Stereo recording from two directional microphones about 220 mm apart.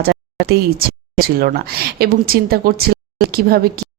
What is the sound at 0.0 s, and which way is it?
Speech, 45° right (ahead or behind).